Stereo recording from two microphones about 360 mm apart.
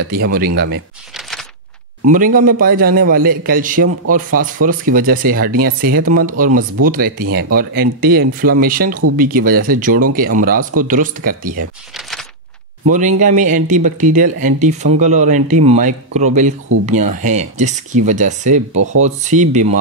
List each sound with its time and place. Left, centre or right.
0.1 s speech: right
2.0 s speech: right
10.6 s speech: right
10.9 s speech: right
12.9 s speech: right